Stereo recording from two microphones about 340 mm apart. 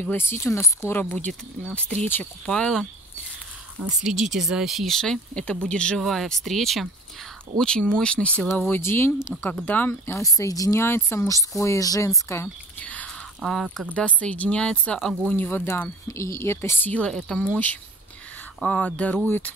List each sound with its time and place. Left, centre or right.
0.0 s speech: centre